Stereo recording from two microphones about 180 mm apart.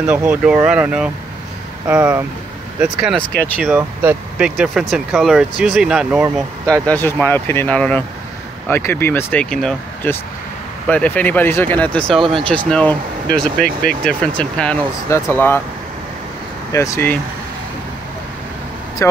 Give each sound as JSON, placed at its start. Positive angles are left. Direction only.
{"t": 0.0, "sound": "speech", "side_deg": -10}
{"t": 2.8, "sound": "speech", "side_deg": -5}
{"t": 16.7, "sound": "speech", "side_deg": 15}